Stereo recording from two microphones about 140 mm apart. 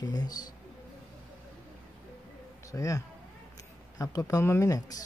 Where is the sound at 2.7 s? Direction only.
25° left (ahead or behind).